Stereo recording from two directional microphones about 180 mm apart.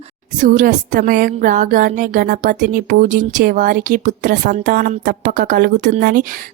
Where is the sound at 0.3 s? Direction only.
45° right (ahead or behind).